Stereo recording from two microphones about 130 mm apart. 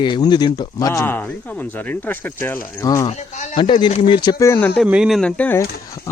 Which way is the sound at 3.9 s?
50° left (ahead or behind).